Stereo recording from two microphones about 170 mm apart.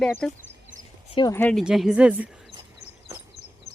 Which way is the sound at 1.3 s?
5° left (ahead or behind).